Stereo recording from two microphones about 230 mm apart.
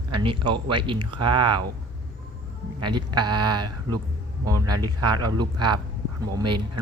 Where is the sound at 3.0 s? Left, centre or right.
Centre.